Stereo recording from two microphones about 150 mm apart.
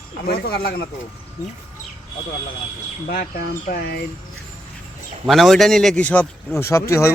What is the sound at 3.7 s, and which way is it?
Speech, 90° left.